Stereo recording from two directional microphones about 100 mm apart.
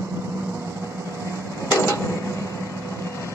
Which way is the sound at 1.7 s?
30° left (ahead or behind).